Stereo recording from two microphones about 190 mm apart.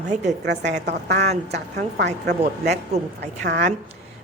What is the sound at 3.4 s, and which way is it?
Speech, 45° right (ahead or behind).